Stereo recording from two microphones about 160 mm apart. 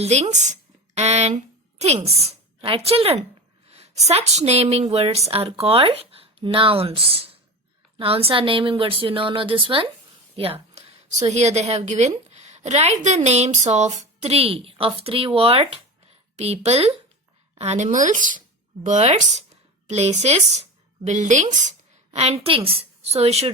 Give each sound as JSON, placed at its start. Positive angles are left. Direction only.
{"t": 0.0, "sound": "a woman's voice", "side_deg": -45}
{"t": 10.3, "sound": "a sound", "side_deg": -35}
{"t": 11.3, "sound": "a woman's voice", "side_deg": -45}